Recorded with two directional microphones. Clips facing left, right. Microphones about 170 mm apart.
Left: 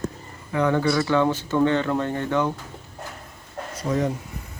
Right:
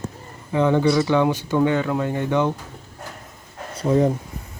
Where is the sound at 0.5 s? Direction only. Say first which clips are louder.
Right 3 dB; 20° right (ahead or behind).